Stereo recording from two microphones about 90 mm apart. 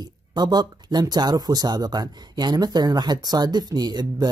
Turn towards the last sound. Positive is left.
turn(degrees=-50)  # may be behind; listen again after turning